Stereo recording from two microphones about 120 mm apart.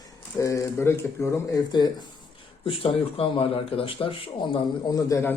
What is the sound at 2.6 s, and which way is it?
Speech, 50° left (ahead or behind).